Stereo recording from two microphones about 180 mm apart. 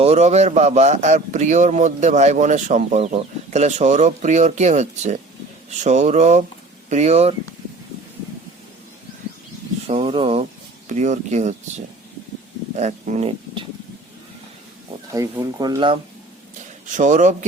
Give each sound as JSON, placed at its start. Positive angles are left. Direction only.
{"t": 0.0, "sound": "a man's voice", "side_deg": -35}
{"t": 9.8, "sound": "a man's voice", "side_deg": -35}
{"t": 12.7, "sound": "speech", "side_deg": -40}
{"t": 15.1, "sound": "speech", "side_deg": -20}
{"t": 16.8, "sound": "a man's voice", "side_deg": -45}